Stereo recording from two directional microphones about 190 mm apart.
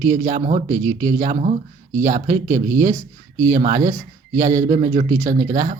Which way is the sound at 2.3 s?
15° right (ahead or behind).